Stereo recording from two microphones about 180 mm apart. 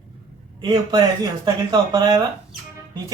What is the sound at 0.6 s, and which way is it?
A man's voice, 25° right (ahead or behind).